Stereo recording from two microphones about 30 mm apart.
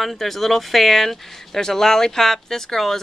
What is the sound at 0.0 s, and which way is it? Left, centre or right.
Speech, centre.